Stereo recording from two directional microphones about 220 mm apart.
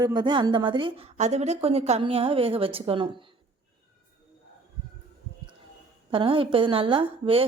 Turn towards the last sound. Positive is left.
turn(degrees=-25)  # may be behind; listen again after turning